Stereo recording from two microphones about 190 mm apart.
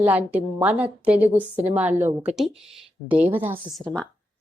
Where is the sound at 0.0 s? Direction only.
10° right (ahead or behind).